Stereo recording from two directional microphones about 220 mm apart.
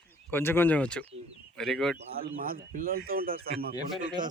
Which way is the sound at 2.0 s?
40° right (ahead or behind).